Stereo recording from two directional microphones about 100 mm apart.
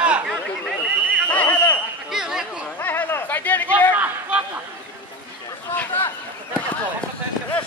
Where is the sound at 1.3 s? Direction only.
15° left (ahead or behind).